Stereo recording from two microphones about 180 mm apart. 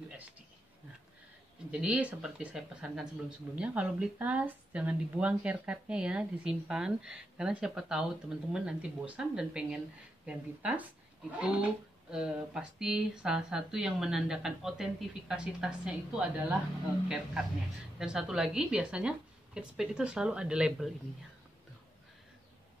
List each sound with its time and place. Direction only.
1.7 s speech: 5° right (ahead or behind)